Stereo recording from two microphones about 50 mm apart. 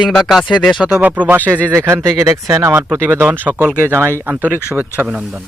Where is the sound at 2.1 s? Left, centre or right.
Right.